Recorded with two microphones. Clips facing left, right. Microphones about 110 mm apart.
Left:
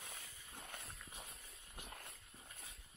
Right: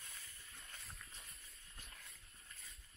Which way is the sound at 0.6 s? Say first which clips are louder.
Left 5 dB; 60° left (ahead or behind).